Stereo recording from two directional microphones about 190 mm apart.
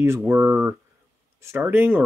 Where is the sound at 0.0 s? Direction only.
10° right (ahead or behind).